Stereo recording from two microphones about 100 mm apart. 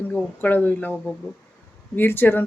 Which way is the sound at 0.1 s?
15° left (ahead or behind).